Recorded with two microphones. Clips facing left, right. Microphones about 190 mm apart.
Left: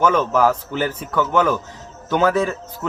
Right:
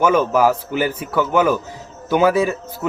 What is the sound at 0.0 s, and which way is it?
Speech, 10° right (ahead or behind).